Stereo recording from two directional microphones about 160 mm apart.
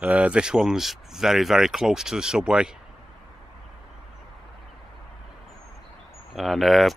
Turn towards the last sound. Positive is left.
turn(degrees=0)  # may be behind; listen again after turning